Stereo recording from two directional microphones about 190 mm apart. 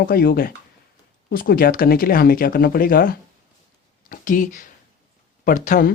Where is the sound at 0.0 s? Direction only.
50° left (ahead or behind).